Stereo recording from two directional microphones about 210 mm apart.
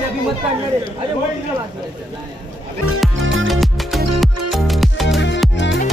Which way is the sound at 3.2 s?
70° right (ahead or behind).